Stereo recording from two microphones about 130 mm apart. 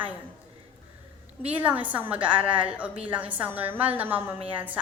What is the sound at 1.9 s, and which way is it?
A woman's voice, 10° right (ahead or behind).